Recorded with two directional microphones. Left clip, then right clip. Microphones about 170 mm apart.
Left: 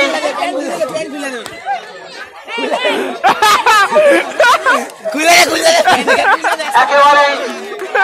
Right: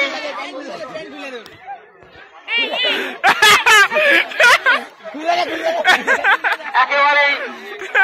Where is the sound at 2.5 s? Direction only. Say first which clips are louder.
Left 2 dB; 15° right (ahead or behind).